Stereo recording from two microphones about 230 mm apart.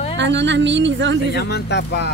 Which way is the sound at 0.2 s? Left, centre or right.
Right.